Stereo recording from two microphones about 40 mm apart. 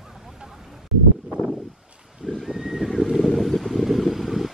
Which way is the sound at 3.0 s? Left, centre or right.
Centre.